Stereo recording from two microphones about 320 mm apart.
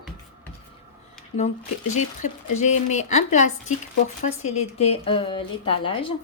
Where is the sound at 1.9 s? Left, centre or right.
Left.